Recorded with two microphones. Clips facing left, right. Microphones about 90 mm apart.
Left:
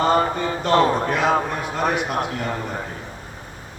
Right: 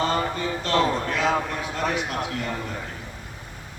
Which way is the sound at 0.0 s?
55° left (ahead or behind).